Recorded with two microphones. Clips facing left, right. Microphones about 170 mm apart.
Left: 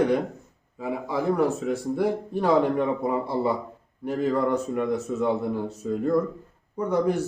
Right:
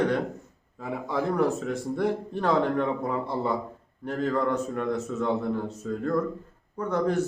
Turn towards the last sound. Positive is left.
turn(degrees=10)  # may be behind; listen again after turning